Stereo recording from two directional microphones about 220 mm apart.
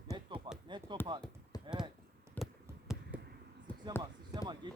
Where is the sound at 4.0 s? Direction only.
20° right (ahead or behind).